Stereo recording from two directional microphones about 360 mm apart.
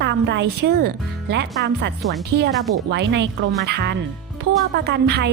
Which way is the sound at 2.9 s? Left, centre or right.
Right.